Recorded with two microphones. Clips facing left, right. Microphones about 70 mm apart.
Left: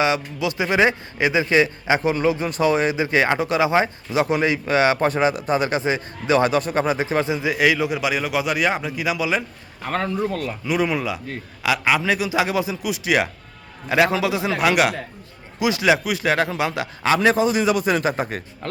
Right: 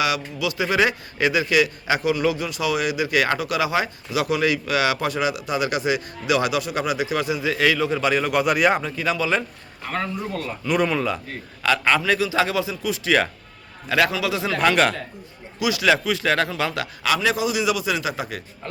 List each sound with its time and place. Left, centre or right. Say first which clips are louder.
0.0 s a man's voice: left 2 dB; left; by 8.9 s centre
9.0 s a man's voice: even; centre
9.8 s speech: left 4 dB; left
10.7 s a man's voice: right 1 dB; centre
14.6 s a man's voice: even; centre
15.5 s a man's voice: left 1 dB; left
17.2 s a man's voice: left 5 dB; left